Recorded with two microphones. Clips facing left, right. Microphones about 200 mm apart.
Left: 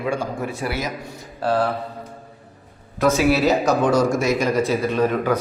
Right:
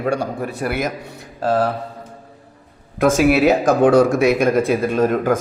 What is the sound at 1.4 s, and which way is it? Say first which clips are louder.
Speech: right 2 dB; 45° right (ahead or behind).